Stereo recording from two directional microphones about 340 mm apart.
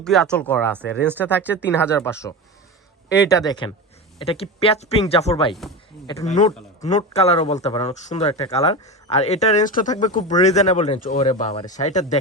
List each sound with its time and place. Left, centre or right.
0.0 s speech: centre
1.6 s speech: centre